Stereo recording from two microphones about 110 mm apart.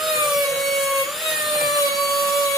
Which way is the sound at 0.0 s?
Centre (ahead or behind).